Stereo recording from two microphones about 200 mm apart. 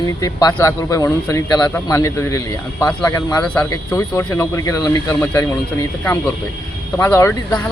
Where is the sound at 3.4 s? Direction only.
5° left (ahead or behind).